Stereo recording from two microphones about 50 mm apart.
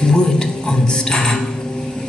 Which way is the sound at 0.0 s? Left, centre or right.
Centre.